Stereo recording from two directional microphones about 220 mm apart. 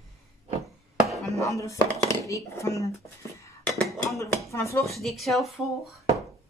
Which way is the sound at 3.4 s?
5° left (ahead or behind).